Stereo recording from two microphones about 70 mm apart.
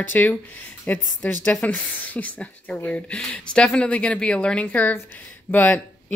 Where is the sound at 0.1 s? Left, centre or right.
Left.